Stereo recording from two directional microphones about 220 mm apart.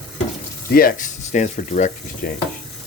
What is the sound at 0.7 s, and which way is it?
Speech, 40° left (ahead or behind).